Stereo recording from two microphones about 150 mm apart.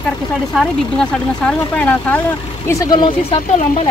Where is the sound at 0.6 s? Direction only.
5° left (ahead or behind).